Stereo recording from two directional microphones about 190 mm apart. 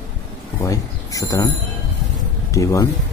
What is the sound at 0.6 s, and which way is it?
Speech, 15° left (ahead or behind).